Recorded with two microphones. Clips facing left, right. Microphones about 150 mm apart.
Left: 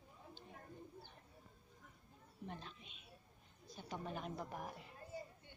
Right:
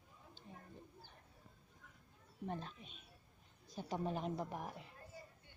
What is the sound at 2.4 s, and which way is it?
A woman's voice, 40° right (ahead or behind).